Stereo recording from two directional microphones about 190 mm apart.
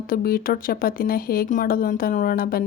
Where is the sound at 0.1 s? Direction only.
50° left (ahead or behind).